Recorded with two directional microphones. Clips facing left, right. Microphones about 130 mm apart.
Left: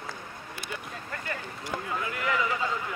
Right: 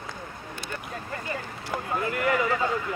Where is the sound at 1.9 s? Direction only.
50° right (ahead or behind).